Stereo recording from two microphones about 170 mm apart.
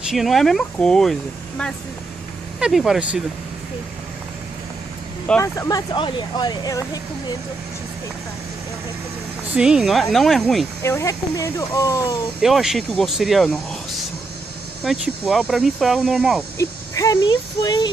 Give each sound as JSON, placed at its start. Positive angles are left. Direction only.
{"t": 0.1, "sound": "speech", "side_deg": 0}
{"t": 2.6, "sound": "speech", "side_deg": 0}
{"t": 5.4, "sound": "speech", "side_deg": 20}
{"t": 9.6, "sound": "speech", "side_deg": -5}
{"t": 10.8, "sound": "speech", "side_deg": 15}
{"t": 12.4, "sound": "speech", "side_deg": 0}
{"t": 14.8, "sound": "speech", "side_deg": 0}
{"t": 16.5, "sound": "speech", "side_deg": 20}